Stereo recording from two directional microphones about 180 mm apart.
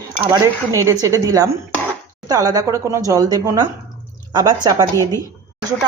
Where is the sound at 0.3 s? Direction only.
15° right (ahead or behind).